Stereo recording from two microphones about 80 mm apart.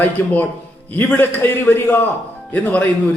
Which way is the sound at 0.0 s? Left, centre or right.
Left.